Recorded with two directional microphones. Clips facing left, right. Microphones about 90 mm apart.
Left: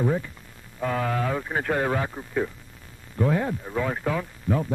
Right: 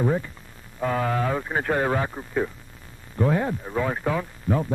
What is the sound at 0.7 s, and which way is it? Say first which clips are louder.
Speech: right 2 dB; 35° right (ahead or behind).